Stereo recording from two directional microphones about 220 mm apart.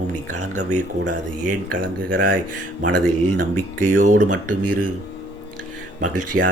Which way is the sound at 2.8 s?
90° right.